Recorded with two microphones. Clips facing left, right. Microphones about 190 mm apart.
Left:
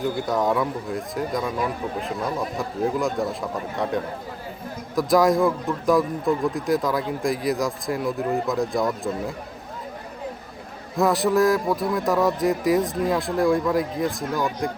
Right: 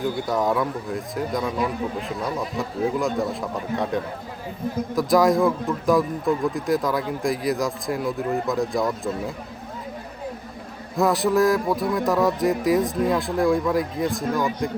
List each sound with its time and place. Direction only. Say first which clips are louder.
0.0 s speech: even; centre (ahead or behind)
10.9 s speech: even; centre (ahead or behind)